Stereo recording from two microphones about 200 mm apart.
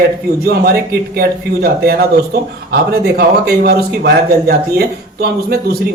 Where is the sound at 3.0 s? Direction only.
50° right (ahead or behind).